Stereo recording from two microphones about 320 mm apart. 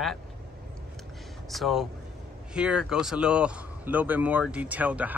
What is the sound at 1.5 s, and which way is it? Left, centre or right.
Speech, centre.